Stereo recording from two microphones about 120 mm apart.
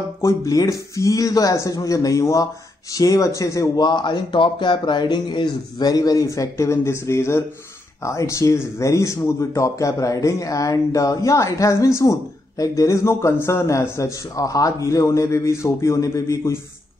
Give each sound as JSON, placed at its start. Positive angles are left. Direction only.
{"t": 0.2, "sound": "a man's voice", "side_deg": 25}